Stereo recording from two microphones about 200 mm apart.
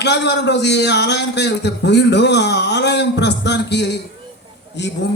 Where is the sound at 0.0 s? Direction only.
60° left (ahead or behind).